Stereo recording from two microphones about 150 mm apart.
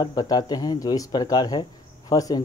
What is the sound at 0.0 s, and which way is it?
Speech, 25° left (ahead or behind).